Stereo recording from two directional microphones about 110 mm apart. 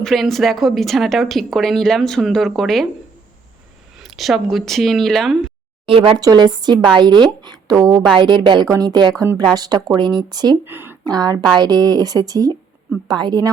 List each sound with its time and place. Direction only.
0.0 s speech: centre (ahead or behind)
4.0 s speech: centre (ahead or behind)
5.8 s speech: 55° right (ahead or behind)
6.1 s a woman's voice: 40° right (ahead or behind)
10.7 s speech: 20° right (ahead or behind)
11.0 s a woman's voice: 35° right (ahead or behind)